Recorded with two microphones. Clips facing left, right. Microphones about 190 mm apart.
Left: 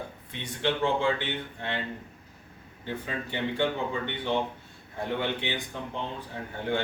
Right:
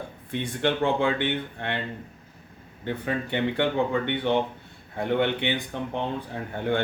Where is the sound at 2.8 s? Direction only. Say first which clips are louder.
Right 6 dB; 60° right (ahead or behind).